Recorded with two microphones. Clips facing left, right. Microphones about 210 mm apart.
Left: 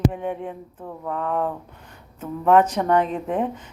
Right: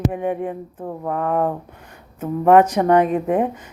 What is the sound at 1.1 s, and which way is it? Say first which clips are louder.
Speech: right 4 dB; 55° right (ahead or behind).